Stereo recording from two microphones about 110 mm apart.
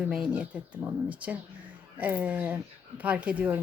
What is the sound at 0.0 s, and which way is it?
Speech, 10° right (ahead or behind).